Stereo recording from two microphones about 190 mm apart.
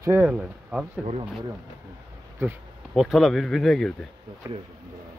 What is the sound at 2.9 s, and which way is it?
Speech, centre (ahead or behind).